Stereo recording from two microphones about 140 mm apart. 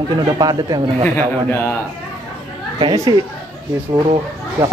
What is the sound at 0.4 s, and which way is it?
Speech, 25° right (ahead or behind).